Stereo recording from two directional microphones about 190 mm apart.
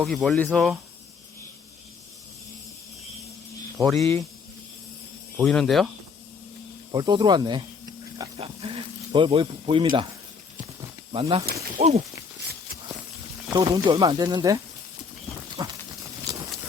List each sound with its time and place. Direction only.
0.0 s speech: centre (ahead or behind)
5.4 s speech: centre (ahead or behind)
6.9 s speech: 20° right (ahead or behind)
8.4 s snake: 30° right (ahead or behind)
11.1 s speech: 30° right (ahead or behind)
13.5 s speech: 20° right (ahead or behind)
15.6 s goat: 20° right (ahead or behind)
16.3 s a sound: 20° right (ahead or behind)